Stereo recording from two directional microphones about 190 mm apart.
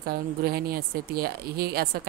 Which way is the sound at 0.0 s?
50° right (ahead or behind).